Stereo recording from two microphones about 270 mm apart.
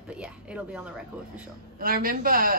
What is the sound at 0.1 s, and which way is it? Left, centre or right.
Speech, centre.